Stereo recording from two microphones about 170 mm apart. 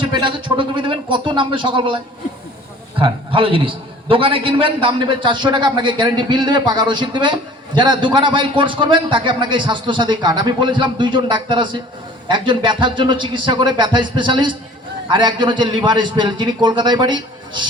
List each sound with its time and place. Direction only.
0.0 s a man's voice: 25° right (ahead or behind)
3.0 s a man's voice: 30° right (ahead or behind)